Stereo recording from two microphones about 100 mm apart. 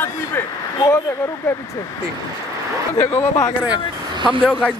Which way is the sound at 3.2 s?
30° left (ahead or behind).